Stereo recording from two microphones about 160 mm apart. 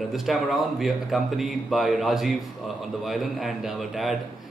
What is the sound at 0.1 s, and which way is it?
A man's voice, centre (ahead or behind).